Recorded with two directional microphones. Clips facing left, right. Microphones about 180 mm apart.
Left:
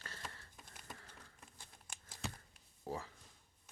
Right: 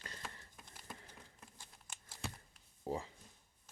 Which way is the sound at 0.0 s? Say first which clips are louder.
Right 1 dB; 20° right (ahead or behind).